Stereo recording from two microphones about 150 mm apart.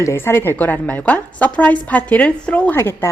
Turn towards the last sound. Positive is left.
turn(degrees=15)  # may be behind; listen again after turning